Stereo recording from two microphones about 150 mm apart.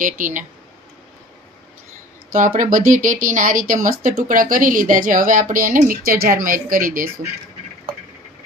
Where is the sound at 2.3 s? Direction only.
60° right (ahead or behind).